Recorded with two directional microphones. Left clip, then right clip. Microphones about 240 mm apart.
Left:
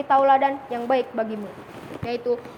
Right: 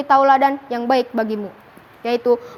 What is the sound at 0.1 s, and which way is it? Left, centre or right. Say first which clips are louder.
A woman's voice: right 4 dB; right.